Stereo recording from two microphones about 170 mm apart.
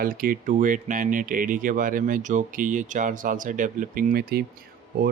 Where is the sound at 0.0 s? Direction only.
55° right (ahead or behind).